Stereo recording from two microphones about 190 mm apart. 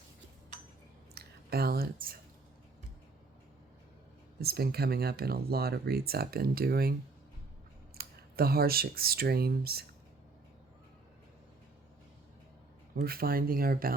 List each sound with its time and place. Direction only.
1.1 s a sound: 55° right (ahead or behind)
4.4 s speech: 55° right (ahead or behind)
7.9 s speech: 50° right (ahead or behind)
13.0 s speech: 50° right (ahead or behind)